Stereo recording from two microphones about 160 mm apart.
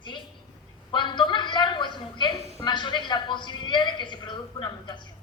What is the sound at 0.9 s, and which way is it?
A woman's voice, 30° left (ahead or behind).